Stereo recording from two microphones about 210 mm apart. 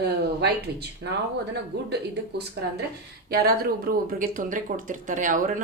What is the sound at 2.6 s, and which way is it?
Speech, 55° right (ahead or behind).